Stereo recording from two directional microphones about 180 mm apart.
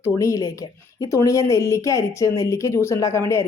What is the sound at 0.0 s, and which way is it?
Speech, 15° left (ahead or behind).